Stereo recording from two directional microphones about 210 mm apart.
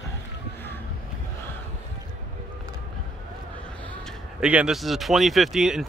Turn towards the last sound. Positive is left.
turn(degrees=0)  # may be behind; listen again after turning